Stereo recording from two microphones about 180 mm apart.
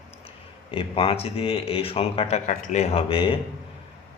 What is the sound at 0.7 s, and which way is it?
Speech, 30° left (ahead or behind).